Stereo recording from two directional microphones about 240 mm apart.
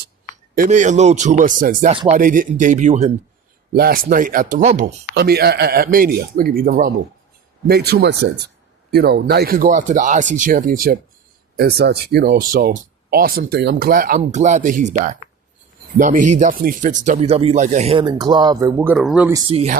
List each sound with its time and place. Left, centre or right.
0.5 s speech: right
5.1 s speech: right; by 19.3 s centre
19.3 s speech: right